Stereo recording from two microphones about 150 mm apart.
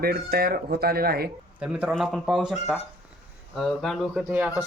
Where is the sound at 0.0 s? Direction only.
90° right.